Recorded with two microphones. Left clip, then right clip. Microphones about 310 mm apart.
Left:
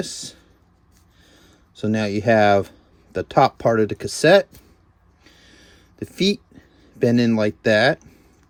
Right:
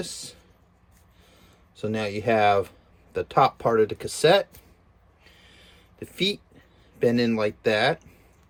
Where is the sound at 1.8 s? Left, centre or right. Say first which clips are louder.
Left 5 dB; left.